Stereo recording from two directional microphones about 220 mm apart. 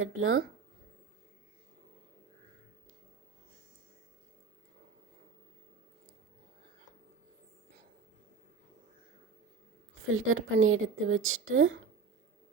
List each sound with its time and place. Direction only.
0.0 s a woman's voice: 70° right (ahead or behind)
10.1 s a woman's voice: 65° right (ahead or behind)